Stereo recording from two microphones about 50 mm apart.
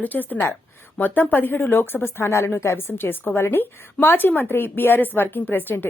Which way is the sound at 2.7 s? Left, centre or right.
Left.